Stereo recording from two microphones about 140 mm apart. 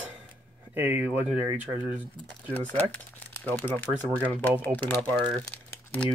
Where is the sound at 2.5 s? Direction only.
10° left (ahead or behind).